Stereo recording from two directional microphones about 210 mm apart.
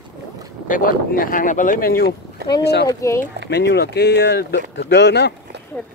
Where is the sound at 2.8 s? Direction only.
15° left (ahead or behind).